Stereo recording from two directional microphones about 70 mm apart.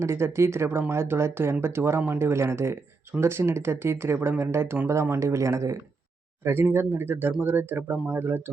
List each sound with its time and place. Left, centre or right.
0.0 s speech: right
6.4 s speech: right